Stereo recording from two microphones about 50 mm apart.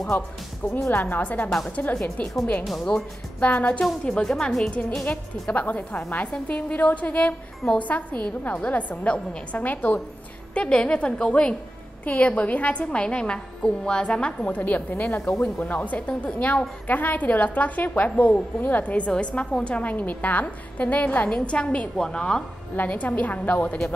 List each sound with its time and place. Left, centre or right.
0.9 s a woman's voice: left
2.6 s a woman's voice: centre
3.3 s a woman's voice: left
4.0 s a woman's voice: centre
10.5 s a woman's voice: left
12.0 s a woman's voice: left
14.5 s a woman's voice: left
21.5 s a woman's voice: left
22.8 s a woman's voice: left